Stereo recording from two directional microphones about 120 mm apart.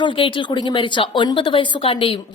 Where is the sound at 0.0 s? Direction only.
45° left (ahead or behind).